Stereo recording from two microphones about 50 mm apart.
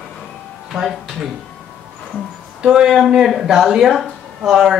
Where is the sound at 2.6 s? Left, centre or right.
Centre.